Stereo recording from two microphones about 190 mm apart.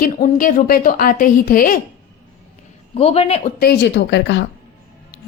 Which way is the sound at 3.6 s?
60° left (ahead or behind).